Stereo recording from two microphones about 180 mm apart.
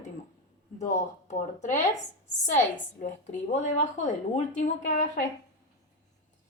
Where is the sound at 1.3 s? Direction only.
40° left (ahead or behind).